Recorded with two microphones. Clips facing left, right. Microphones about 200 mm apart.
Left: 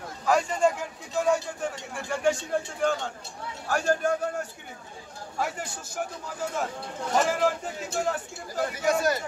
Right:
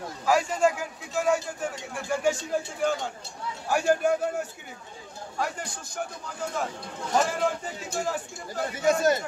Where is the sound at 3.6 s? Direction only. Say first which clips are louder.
Right 2 dB; 10° right (ahead or behind).